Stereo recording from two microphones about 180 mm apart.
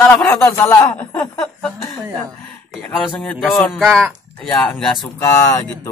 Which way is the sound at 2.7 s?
10° left (ahead or behind).